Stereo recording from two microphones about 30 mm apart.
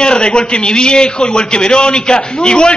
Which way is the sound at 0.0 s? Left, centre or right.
Left.